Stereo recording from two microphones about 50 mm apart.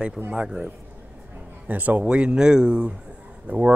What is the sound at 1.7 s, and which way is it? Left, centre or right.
Speech, right.